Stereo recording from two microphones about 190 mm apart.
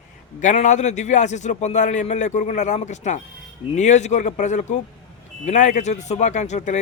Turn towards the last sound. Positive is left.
turn(degrees=40)  # may be behind; listen again after turning